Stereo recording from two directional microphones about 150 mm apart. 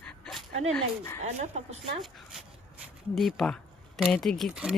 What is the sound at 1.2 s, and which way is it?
Speech, 50° right (ahead or behind).